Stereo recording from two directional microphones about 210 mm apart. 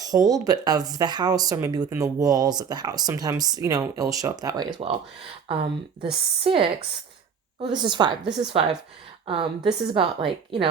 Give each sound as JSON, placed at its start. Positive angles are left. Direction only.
{"t": 0.0, "sound": "a woman's voice", "side_deg": -15}
{"t": 7.7, "sound": "a woman's voice", "side_deg": -20}